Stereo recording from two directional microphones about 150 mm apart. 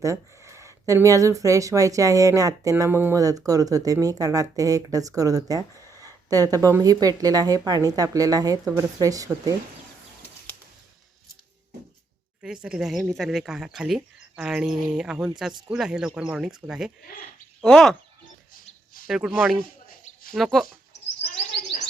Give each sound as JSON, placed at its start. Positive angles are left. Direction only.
{"t": 0.0, "sound": "speech", "side_deg": -20}
{"t": 12.6, "sound": "speech", "side_deg": -5}
{"t": 19.0, "sound": "speech", "side_deg": -5}